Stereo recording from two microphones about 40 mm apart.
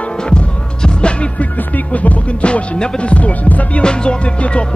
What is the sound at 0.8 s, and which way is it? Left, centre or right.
Music, left.